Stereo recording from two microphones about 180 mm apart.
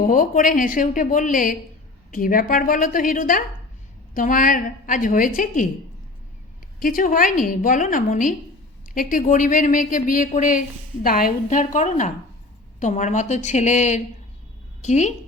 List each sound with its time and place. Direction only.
0.0 s a woman's voice: 50° left (ahead or behind)
6.7 s a woman's voice: 50° left (ahead or behind)